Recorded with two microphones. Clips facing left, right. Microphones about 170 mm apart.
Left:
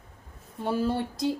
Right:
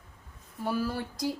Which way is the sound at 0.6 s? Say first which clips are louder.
Left 4 dB; 25° left (ahead or behind).